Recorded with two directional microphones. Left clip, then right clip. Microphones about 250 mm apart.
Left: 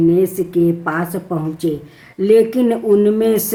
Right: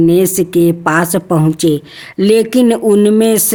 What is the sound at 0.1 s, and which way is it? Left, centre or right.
Speech, right.